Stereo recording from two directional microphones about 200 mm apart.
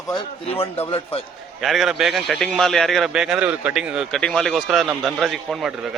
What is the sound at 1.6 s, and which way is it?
A man's voice, centre (ahead or behind).